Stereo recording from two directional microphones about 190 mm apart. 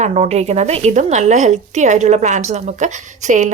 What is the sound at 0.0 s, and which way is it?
Speech, 35° right (ahead or behind).